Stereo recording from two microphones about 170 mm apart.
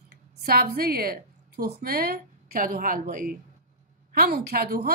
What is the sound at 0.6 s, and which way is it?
A woman's voice, 65° right (ahead or behind).